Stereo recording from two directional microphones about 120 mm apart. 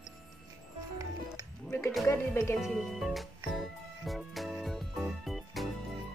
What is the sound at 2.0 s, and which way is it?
Music, 20° left (ahead or behind).